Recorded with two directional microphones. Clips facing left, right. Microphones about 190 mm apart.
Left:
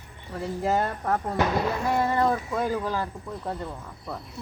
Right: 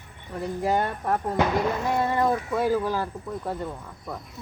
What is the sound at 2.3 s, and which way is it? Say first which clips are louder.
Speech: right 3 dB; 5° right (ahead or behind).